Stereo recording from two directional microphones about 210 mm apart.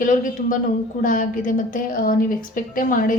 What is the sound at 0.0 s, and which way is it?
A woman's voice, 40° left (ahead or behind).